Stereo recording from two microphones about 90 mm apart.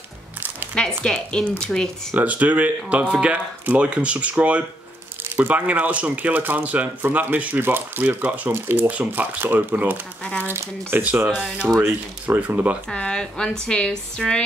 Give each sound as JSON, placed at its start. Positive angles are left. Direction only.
{"t": 0.7, "sound": "speech", "side_deg": 10}
{"t": 2.1, "sound": "speech", "side_deg": -15}
{"t": 11.3, "sound": "speech", "side_deg": -5}
{"t": 11.8, "sound": "speech", "side_deg": -20}
{"t": 12.9, "sound": "speech", "side_deg": 10}